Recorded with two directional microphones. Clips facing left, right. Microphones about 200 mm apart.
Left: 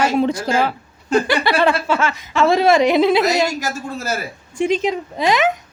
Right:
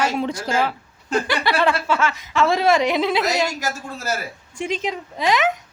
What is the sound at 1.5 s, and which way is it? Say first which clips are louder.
Speech: left 1 dB; 30° left (ahead or behind).